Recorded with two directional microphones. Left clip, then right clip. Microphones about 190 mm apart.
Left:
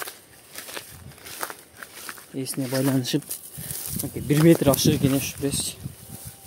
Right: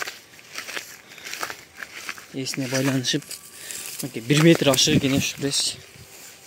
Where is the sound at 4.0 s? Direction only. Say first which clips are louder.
Right 2 dB; centre (ahead or behind).